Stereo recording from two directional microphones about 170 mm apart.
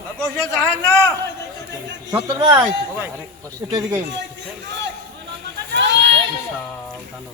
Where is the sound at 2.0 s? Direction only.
20° right (ahead or behind).